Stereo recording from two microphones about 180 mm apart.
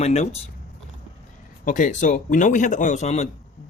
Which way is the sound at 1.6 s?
45° left (ahead or behind).